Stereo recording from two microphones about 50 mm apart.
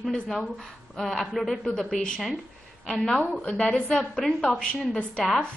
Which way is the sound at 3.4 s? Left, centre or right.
Centre.